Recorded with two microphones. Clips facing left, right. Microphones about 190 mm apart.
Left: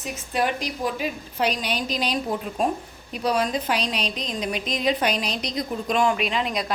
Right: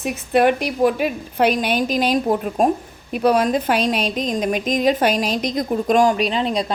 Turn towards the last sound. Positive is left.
turn(degrees=-30)  # may be behind; listen again after turning